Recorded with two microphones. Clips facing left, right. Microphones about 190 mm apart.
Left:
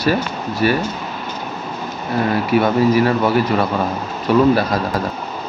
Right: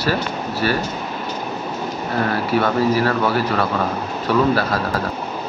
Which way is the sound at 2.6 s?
15° left (ahead or behind).